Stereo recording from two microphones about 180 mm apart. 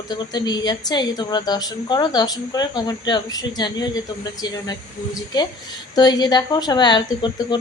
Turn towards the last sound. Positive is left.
turn(degrees=20)  # may be behind; listen again after turning